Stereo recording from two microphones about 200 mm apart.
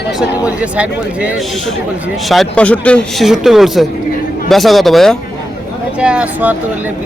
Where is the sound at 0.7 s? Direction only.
5° right (ahead or behind).